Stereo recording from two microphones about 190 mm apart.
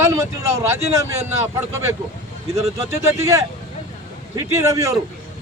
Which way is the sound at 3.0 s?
15° right (ahead or behind).